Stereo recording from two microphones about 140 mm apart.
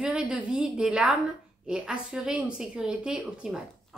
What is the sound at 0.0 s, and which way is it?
A woman's voice, 10° right (ahead or behind).